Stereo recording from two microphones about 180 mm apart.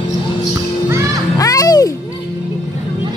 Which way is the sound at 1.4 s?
20° left (ahead or behind).